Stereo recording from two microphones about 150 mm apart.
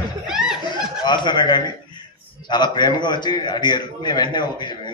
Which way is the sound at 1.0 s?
30° left (ahead or behind).